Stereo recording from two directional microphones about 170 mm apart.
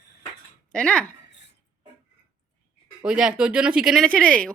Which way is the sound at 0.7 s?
5° left (ahead or behind).